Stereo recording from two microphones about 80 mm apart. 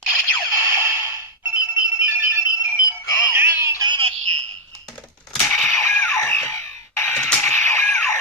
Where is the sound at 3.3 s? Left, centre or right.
Right.